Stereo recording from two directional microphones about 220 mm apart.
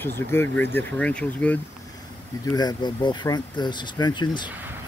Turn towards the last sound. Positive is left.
turn(degrees=20)  # may be behind; listen again after turning